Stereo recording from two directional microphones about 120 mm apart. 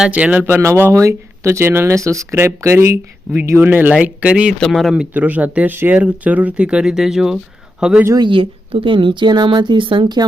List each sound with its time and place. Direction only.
0.0 s speech: 10° right (ahead or behind)
5.1 s speech: 15° right (ahead or behind)
8.0 s speech: 35° right (ahead or behind)